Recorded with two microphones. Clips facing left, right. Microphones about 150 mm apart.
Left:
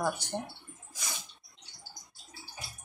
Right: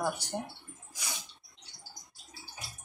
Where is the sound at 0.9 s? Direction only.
15° right (ahead or behind).